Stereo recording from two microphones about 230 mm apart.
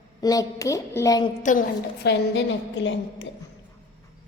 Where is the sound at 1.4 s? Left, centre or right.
Left.